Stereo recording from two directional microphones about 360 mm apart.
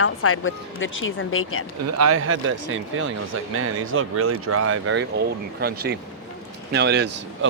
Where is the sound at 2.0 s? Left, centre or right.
Right.